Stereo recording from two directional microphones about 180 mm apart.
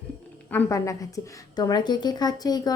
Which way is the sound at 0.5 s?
15° left (ahead or behind).